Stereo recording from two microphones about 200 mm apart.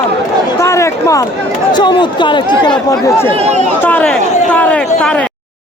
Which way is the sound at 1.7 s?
20° left (ahead or behind).